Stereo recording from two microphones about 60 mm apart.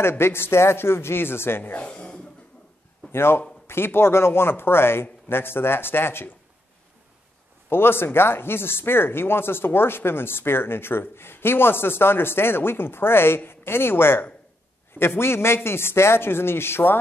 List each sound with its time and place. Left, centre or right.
0.0 s speech: left
1.6 s speech: left
3.1 s a man's voice: left
7.7 s speech: left